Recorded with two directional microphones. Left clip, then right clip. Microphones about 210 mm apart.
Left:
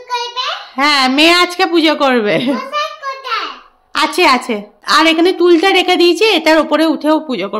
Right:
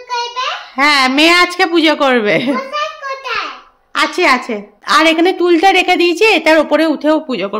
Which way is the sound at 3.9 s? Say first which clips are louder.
Left 1 dB; 10° left (ahead or behind).